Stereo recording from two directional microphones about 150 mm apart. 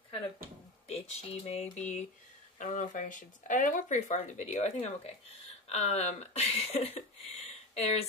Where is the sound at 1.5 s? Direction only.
50° left (ahead or behind).